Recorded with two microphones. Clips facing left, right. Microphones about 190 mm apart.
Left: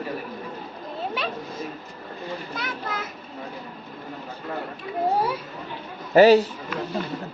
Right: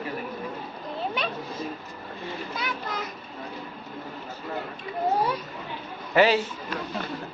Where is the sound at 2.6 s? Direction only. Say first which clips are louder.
Left 1 dB; 5° left (ahead or behind).